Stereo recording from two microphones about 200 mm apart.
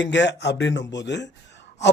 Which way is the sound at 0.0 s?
60° left (ahead or behind).